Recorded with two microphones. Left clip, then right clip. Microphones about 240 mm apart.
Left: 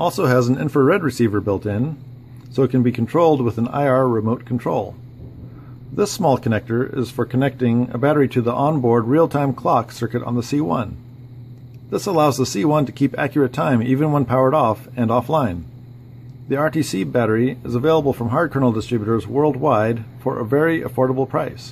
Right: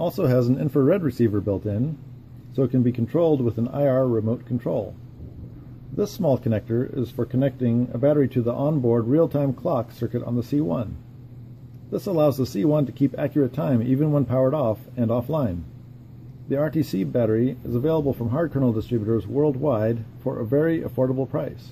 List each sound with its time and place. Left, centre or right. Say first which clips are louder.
0.0 s speech: left 5 dB; centre
5.9 s speech: left 5 dB; centre
11.9 s speech: left 4 dB; centre